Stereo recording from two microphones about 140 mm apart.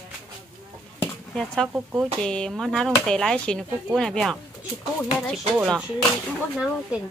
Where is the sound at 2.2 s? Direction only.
5° left (ahead or behind).